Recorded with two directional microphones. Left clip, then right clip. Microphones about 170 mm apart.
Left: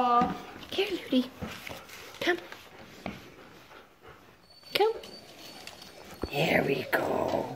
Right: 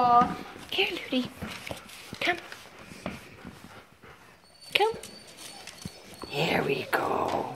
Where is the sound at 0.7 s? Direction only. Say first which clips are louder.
Right 2 dB; 40° left (ahead or behind).